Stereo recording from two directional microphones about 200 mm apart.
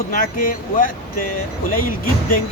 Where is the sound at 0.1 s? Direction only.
45° left (ahead or behind).